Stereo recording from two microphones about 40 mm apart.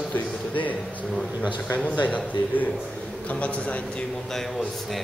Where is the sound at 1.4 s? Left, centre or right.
Left.